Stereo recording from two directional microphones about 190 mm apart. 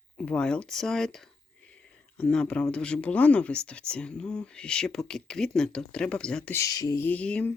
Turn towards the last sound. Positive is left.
turn(degrees=5)  # may be behind; listen again after turning